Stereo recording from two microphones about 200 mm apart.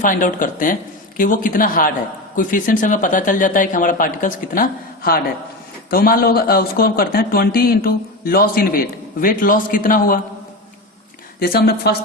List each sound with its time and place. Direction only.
0.0 s speech: 40° left (ahead or behind)
11.3 s speech: 50° left (ahead or behind)